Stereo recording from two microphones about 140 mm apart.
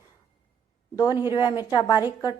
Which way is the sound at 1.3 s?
30° left (ahead or behind).